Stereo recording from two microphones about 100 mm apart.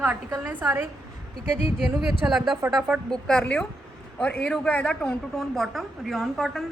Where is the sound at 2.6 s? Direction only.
30° right (ahead or behind).